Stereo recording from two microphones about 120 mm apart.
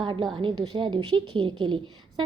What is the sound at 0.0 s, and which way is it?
A woman's voice, 40° right (ahead or behind).